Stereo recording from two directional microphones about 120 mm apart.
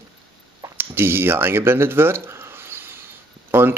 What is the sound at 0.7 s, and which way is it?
Speech, 20° right (ahead or behind).